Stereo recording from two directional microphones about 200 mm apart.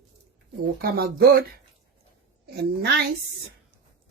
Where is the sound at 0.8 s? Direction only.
50° right (ahead or behind).